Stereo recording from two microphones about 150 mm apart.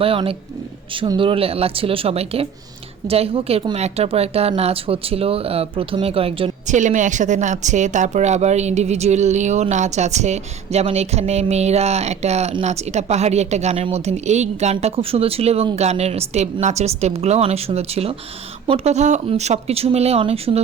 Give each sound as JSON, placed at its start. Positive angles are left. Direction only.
{"t": 0.0, "sound": "a woman's voice", "side_deg": -40}
{"t": 6.7, "sound": "a woman's voice", "side_deg": -55}